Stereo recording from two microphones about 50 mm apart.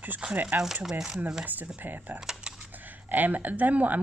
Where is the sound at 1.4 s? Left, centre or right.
Right.